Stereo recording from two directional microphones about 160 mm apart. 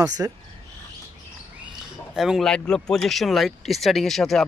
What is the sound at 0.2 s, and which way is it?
Speech, 20° right (ahead or behind).